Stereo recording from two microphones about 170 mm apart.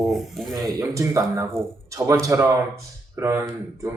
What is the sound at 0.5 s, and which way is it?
Speech, 20° right (ahead or behind).